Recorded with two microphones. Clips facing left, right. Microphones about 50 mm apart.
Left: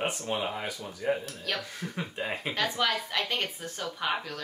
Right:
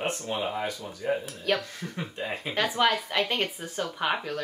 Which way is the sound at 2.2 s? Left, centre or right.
Centre.